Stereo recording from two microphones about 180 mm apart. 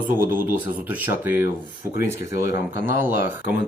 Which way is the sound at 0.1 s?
50° right (ahead or behind).